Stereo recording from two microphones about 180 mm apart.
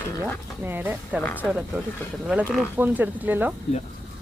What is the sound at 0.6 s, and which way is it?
Speech, 10° right (ahead or behind).